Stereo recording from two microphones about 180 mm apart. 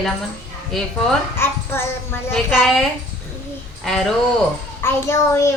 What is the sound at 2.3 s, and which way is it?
Speech, centre (ahead or behind).